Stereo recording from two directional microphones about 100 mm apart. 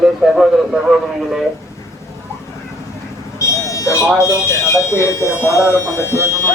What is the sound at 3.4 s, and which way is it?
Speech, 30° left (ahead or behind).